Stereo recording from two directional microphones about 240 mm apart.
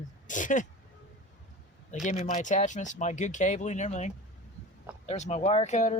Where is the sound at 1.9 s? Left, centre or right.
Left.